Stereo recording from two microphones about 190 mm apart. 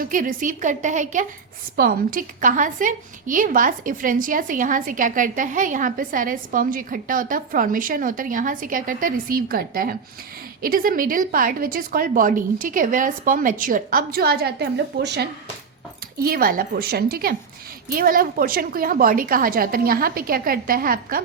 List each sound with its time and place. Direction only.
0.0 s a woman's voice: 45° right (ahead or behind); by 15.3 s 65° right (ahead or behind)
16.1 s a woman's voice: 50° right (ahead or behind)